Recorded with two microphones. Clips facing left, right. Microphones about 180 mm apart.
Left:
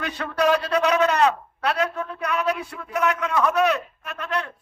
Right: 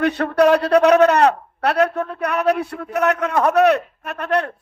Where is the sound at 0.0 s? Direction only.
60° right (ahead or behind).